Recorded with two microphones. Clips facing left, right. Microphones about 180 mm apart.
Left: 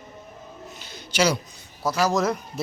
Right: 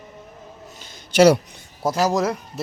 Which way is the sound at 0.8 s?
50° right (ahead or behind).